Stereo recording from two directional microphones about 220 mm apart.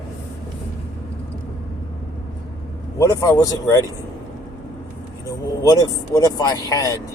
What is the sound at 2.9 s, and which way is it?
Speech, 15° left (ahead or behind).